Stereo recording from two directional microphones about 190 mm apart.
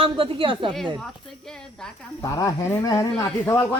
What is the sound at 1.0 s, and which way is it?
Speech, centre (ahead or behind).